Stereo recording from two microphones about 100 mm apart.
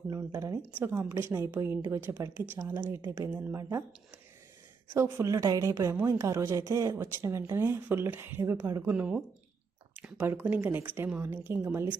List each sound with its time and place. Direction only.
0.1 s a woman's voice: 40° right (ahead or behind)
0.8 s speech: 20° right (ahead or behind)
3.6 s speech: 30° right (ahead or behind)
5.1 s a woman's voice: 30° right (ahead or behind)
8.9 s speech: 10° right (ahead or behind)
10.2 s speech: 20° right (ahead or behind)